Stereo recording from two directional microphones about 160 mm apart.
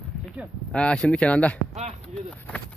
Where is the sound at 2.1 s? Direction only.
5° left (ahead or behind).